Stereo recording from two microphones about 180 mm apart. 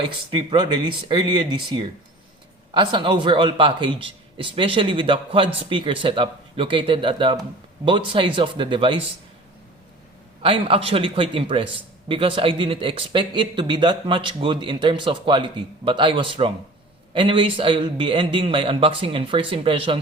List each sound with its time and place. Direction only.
0.3 s a man's voice: 25° right (ahead or behind)
10.4 s a man's voice: 30° right (ahead or behind)